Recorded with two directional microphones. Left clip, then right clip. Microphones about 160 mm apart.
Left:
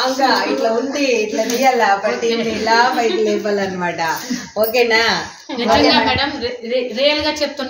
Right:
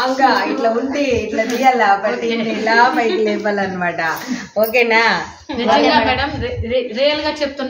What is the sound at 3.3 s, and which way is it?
Speech, 25° left (ahead or behind).